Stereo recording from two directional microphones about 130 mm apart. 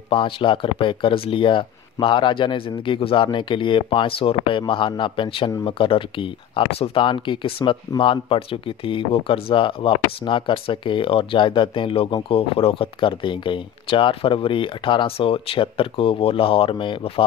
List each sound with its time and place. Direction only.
0.1 s speech: 40° left (ahead or behind)